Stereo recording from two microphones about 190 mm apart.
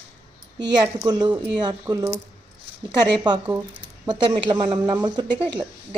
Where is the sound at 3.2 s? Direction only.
20° right (ahead or behind).